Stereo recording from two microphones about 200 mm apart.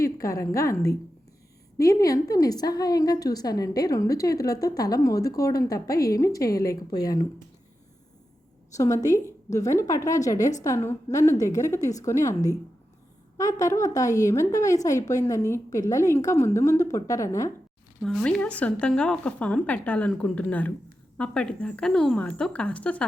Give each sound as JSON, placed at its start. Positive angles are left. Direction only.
{"t": 0.0, "sound": "a woman's voice", "side_deg": 15}
{"t": 8.7, "sound": "a woman's voice", "side_deg": 15}
{"t": 18.0, "sound": "a woman's voice", "side_deg": 5}